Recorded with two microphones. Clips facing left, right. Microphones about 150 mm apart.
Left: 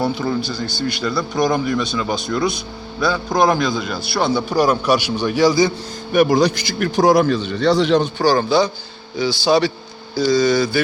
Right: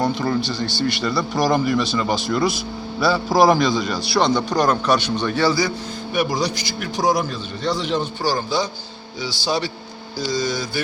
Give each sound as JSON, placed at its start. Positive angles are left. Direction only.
{"t": 0.0, "sound": "a man's voice", "side_deg": 5}
{"t": 6.1, "sound": "a man's voice", "side_deg": 60}